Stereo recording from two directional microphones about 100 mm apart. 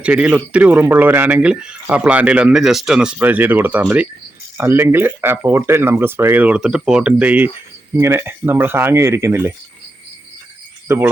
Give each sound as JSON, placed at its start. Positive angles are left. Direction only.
{"t": 0.0, "sound": "speech", "side_deg": -15}
{"t": 3.2, "sound": "speech", "side_deg": -20}
{"t": 7.9, "sound": "speech", "side_deg": -25}
{"t": 10.8, "sound": "cricket", "side_deg": -25}